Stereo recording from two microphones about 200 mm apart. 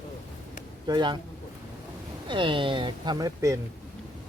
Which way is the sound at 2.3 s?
25° right (ahead or behind).